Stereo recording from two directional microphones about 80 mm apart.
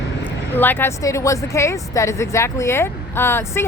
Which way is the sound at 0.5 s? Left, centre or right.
Left.